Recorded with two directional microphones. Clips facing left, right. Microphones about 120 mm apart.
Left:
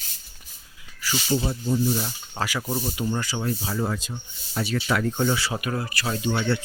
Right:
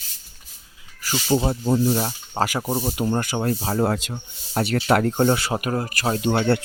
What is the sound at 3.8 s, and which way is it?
Speech, 65° right (ahead or behind).